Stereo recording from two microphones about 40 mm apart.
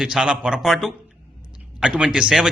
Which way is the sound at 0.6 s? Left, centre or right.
Centre.